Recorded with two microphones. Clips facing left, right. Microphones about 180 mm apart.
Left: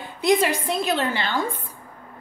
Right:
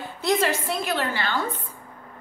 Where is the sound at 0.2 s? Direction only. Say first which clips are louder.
Left 3 dB; 15° left (ahead or behind).